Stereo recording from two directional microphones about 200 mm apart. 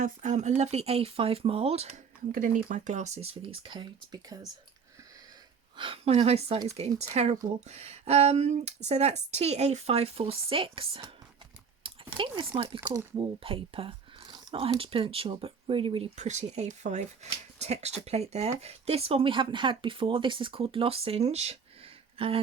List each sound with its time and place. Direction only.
0.0 s speech: 35° right (ahead or behind)
2.3 s speech: 40° right (ahead or behind); by 4.4 s 20° right (ahead or behind)
5.7 s speech: 25° right (ahead or behind)
11.8 s chewing: 25° right (ahead or behind)
12.5 s speech: 25° right (ahead or behind)
12.8 s speech: 15° right (ahead or behind)
13.4 s speech: 25° right (ahead or behind)